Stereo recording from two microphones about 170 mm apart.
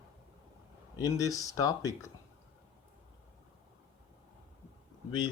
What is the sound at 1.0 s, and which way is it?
Speech, 20° left (ahead or behind).